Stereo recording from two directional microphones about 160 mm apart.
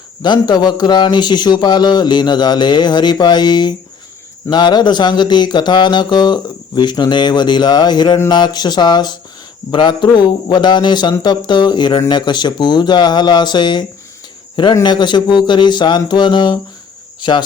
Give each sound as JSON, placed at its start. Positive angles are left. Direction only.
{"t": 0.2, "sound": "a man's voice", "side_deg": 25}